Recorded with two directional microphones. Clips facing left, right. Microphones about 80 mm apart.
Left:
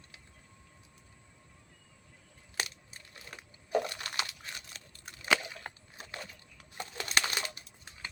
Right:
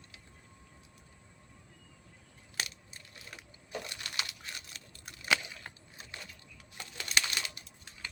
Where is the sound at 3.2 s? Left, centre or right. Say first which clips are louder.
Left 2 dB; left.